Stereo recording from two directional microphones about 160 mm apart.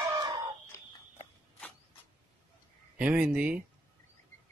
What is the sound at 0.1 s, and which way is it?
Chicken, 25° right (ahead or behind).